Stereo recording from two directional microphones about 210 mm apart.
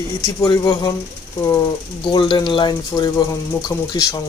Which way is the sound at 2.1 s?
20° left (ahead or behind).